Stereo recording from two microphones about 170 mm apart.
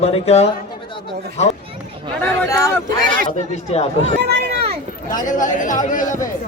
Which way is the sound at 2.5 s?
20° left (ahead or behind).